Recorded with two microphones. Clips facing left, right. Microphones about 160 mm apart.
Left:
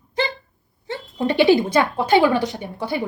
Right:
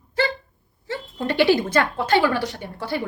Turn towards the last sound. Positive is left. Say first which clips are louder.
# left 2 dB
turn(degrees=15)  # may be behind; listen again after turning